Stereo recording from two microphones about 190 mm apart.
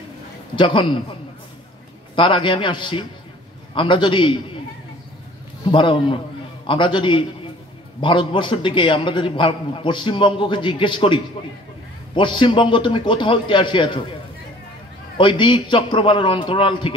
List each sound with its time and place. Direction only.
0.6 s a man's voice: 25° left (ahead or behind)
2.1 s a man's voice: 25° left (ahead or behind)
5.7 s a man's voice: 25° left (ahead or behind)
12.2 s a man's voice: 25° left (ahead or behind)
15.1 s a man's voice: 25° left (ahead or behind)